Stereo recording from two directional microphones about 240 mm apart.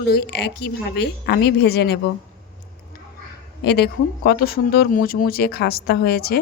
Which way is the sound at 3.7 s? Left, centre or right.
Left.